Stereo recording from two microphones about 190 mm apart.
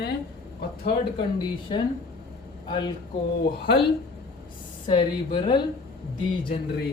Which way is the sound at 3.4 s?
55° left (ahead or behind).